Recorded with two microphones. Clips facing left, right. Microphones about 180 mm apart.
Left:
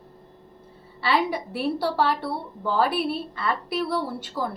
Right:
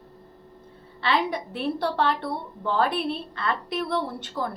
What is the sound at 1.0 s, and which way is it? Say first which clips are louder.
A woman's voice: left 1 dB; 10° left (ahead or behind).